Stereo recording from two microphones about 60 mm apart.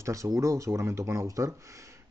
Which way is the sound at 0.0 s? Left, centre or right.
Right.